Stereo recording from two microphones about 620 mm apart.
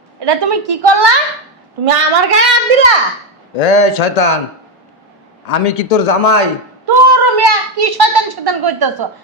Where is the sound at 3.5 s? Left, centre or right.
Left.